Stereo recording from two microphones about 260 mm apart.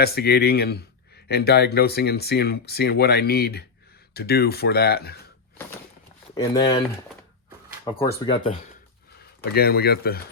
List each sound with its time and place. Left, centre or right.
0.0 s speech: left
6.3 s speech: centre
8.3 s speech: centre
9.4 s speech: left